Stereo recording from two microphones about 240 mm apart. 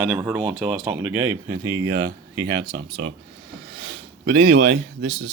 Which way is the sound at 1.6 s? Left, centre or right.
Right.